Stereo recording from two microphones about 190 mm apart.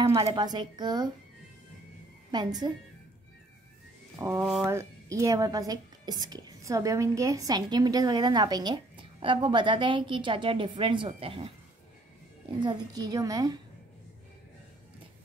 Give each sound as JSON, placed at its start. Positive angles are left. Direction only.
{"t": 0.0, "sound": "a woman's voice", "side_deg": -15}
{"t": 2.3, "sound": "a woman's voice", "side_deg": -20}
{"t": 4.2, "sound": "a woman's voice", "side_deg": -15}
{"t": 12.6, "sound": "a woman's voice", "side_deg": -20}